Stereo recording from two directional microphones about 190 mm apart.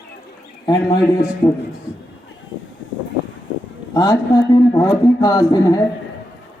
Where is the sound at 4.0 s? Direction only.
20° left (ahead or behind).